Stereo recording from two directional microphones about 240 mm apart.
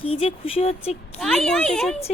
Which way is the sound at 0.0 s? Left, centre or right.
Left.